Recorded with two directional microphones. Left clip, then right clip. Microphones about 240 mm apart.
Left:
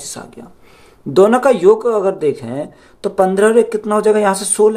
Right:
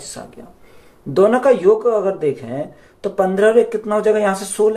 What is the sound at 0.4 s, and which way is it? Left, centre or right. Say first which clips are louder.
Speech: left 3 dB; left.